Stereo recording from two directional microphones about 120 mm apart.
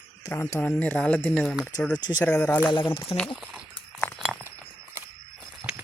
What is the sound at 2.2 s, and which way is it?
Speech, 15° left (ahead or behind).